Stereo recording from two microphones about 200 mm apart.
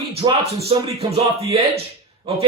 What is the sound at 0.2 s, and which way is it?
Speech, 25° right (ahead or behind).